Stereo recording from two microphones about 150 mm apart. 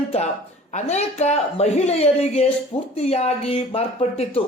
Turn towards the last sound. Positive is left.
turn(degrees=40)  # may be behind; listen again after turning